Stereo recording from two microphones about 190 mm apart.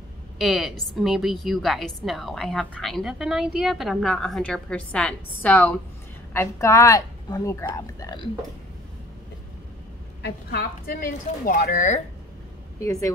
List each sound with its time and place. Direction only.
0.4 s a woman's voice: centre (ahead or behind); by 8.3 s 20° left (ahead or behind)
10.2 s a woman's voice: 55° left (ahead or behind); by 12.0 s 40° left (ahead or behind)
12.7 s speech: 15° left (ahead or behind)